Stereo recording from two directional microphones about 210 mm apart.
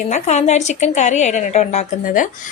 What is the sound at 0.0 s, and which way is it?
A woman's voice, 35° left (ahead or behind).